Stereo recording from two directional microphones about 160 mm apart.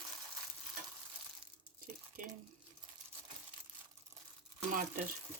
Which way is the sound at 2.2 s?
55° right (ahead or behind).